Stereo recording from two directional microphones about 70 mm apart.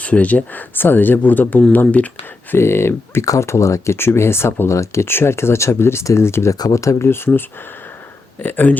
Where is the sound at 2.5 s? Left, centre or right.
Left.